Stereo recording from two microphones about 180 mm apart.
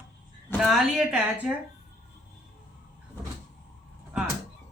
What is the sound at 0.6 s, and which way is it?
Speech, centre (ahead or behind).